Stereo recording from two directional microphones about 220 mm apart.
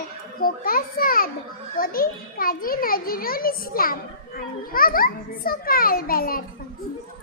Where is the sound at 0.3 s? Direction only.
40° left (ahead or behind).